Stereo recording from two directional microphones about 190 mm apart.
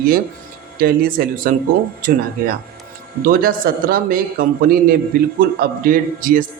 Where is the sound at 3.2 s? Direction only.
50° right (ahead or behind).